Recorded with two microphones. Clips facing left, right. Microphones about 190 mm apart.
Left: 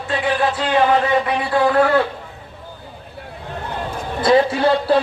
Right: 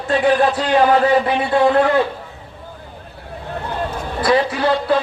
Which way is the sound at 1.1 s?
30° right (ahead or behind).